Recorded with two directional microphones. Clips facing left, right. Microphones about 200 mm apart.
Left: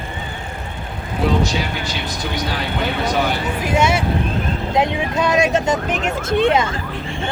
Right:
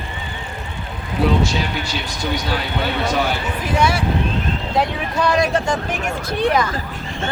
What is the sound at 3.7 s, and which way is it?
Speech, 25° left (ahead or behind).